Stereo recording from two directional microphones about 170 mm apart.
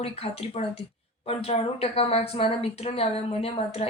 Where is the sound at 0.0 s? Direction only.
35° left (ahead or behind).